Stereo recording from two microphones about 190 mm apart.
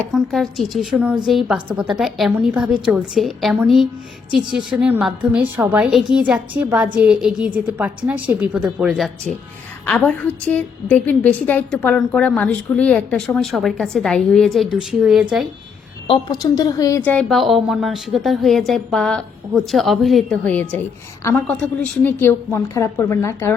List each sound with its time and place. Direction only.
0.1 s a woman's voice: centre (ahead or behind)
16.0 s a woman's voice: 20° left (ahead or behind)
17.0 s a woman's voice: 5° left (ahead or behind)